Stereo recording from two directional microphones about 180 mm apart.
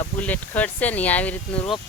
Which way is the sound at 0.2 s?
10° left (ahead or behind).